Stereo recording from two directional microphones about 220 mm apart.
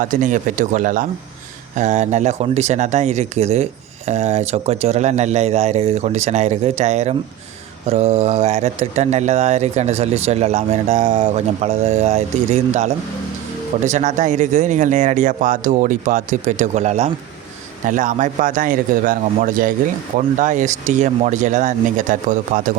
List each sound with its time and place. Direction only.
0.0 s speech: 35° right (ahead or behind)